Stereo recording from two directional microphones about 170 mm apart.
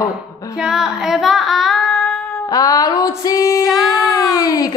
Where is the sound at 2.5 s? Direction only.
20° left (ahead or behind).